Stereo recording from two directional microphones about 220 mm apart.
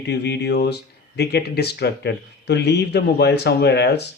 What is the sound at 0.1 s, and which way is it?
Speech, 50° left (ahead or behind).